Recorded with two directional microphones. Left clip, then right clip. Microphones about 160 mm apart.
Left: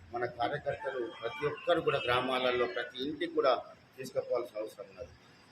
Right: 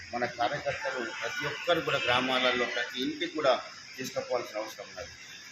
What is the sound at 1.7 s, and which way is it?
A man's voice, 25° left (ahead or behind).